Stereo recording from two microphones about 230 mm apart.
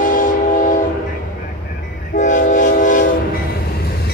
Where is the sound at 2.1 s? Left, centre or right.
Left.